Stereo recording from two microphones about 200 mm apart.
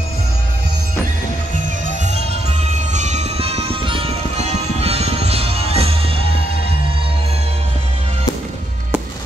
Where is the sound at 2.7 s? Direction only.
35° right (ahead or behind).